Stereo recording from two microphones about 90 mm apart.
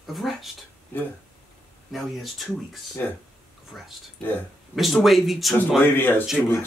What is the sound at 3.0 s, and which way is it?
Speech, 20° left (ahead or behind).